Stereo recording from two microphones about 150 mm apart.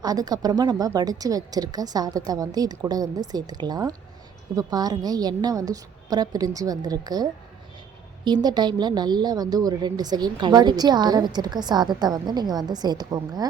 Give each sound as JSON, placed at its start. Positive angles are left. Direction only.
{"t": 0.0, "sound": "a woman's voice", "side_deg": -25}